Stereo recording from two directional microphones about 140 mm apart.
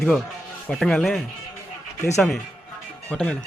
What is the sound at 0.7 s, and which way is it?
Speech, centre (ahead or behind).